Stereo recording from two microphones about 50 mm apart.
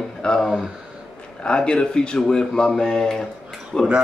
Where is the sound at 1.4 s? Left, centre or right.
Centre.